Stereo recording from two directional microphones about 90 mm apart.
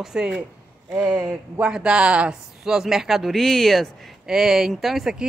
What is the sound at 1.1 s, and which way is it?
Speech, 50° right (ahead or behind).